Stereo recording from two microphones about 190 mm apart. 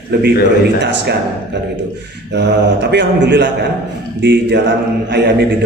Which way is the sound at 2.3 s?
65° right (ahead or behind).